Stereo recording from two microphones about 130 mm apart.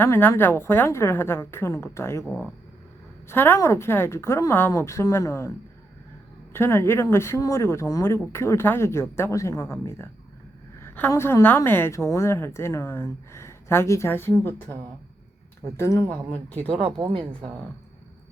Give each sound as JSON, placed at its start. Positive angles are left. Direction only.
{"t": 0.0, "sound": "a woman's voice", "side_deg": 20}
{"t": 3.2, "sound": "a woman's voice", "side_deg": 15}
{"t": 6.5, "sound": "a woman's voice", "side_deg": 20}
{"t": 15.8, "sound": "a woman's voice", "side_deg": 20}